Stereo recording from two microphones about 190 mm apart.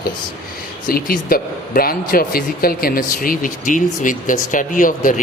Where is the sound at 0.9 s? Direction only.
50° left (ahead or behind).